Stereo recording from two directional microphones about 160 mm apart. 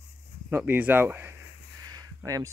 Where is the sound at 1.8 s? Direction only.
25° right (ahead or behind).